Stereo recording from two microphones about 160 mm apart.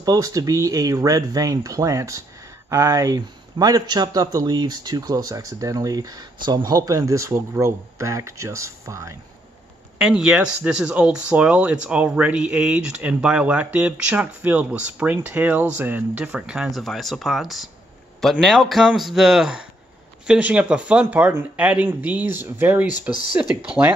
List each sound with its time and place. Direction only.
0.0 s a man's voice: 20° right (ahead or behind)
9.9 s a man's voice: 5° right (ahead or behind)